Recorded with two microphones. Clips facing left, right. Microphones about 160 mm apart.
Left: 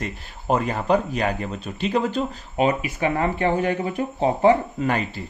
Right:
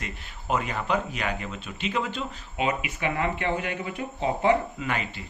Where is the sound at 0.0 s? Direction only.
35° left (ahead or behind).